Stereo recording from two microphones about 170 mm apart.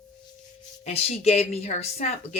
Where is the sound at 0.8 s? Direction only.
35° left (ahead or behind).